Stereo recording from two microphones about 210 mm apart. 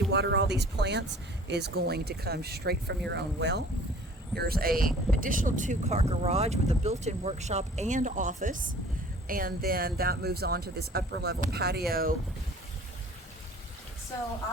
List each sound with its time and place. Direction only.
0.1 s speech: 55° right (ahead or behind)